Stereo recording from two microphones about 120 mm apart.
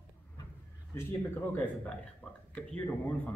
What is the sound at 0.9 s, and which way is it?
Speech, 15° left (ahead or behind).